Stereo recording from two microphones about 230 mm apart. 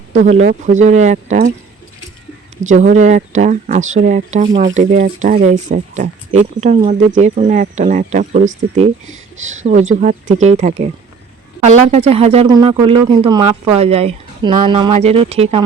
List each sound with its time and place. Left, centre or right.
0.1 s speech: right
2.6 s speech: right